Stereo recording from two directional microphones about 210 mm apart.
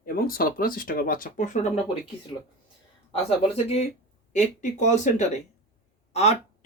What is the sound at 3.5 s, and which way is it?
Speech, 30° left (ahead or behind).